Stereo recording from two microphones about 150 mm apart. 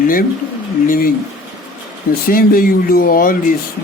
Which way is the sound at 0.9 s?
70° left (ahead or behind).